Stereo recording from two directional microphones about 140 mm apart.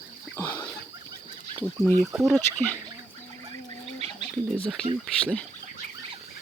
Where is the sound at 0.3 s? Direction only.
15° left (ahead or behind).